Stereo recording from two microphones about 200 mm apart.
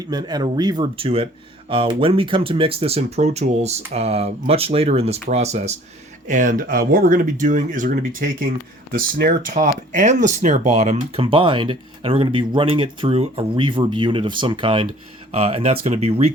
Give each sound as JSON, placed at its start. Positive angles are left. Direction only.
{"t": 0.0, "sound": "speech", "side_deg": -20}
{"t": 9.6, "sound": "speech", "side_deg": -40}